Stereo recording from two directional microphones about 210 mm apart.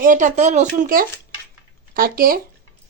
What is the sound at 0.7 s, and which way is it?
Speech, 45° right (ahead or behind).